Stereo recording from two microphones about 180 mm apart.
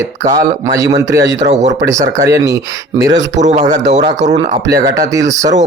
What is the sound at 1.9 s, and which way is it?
Speech, 15° right (ahead or behind).